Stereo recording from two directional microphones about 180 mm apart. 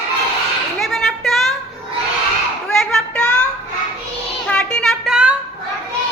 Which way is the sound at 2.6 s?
Centre (ahead or behind).